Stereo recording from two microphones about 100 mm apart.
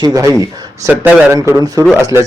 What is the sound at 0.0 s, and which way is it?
A man's voice, 35° right (ahead or behind).